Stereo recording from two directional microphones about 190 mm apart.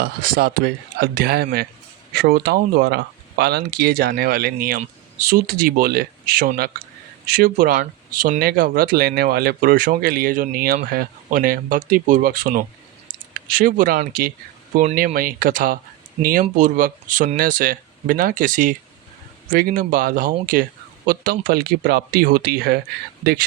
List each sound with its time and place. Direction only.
0.0 s speech: 50° right (ahead or behind)